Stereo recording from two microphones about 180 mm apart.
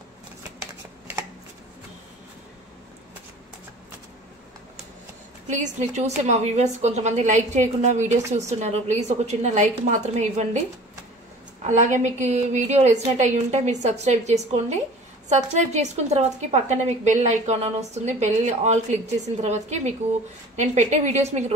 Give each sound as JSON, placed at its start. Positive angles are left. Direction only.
{"t": 5.5, "sound": "a woman's voice", "side_deg": -40}
{"t": 11.6, "sound": "a woman's voice", "side_deg": -40}